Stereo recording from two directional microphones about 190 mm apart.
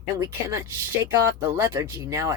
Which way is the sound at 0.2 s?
15° right (ahead or behind).